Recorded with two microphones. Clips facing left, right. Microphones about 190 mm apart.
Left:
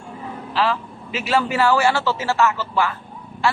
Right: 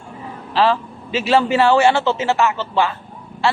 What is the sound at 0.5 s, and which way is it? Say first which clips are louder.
A man's voice: right 5 dB; 35° right (ahead or behind).